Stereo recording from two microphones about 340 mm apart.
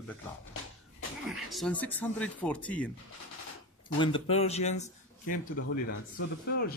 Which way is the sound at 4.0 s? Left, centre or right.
Centre.